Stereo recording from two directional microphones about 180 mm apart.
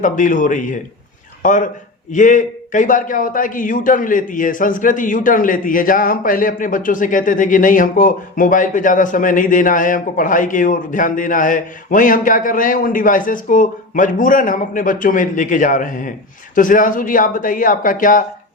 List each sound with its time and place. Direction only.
0.0 s a man's voice: 45° left (ahead or behind)